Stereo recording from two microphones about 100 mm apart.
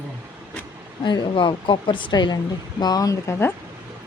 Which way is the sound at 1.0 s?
55° left (ahead or behind).